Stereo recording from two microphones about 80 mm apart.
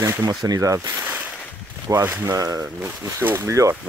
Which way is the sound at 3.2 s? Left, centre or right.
Right.